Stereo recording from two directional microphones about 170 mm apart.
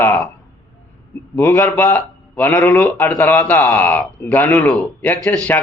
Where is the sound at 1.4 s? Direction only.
20° left (ahead or behind).